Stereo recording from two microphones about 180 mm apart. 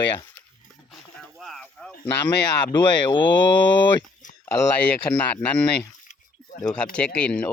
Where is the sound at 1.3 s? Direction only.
Centre (ahead or behind).